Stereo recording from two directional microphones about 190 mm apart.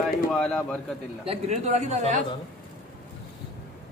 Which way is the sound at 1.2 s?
35° right (ahead or behind).